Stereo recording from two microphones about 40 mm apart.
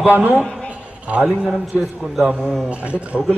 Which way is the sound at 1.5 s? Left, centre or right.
Centre.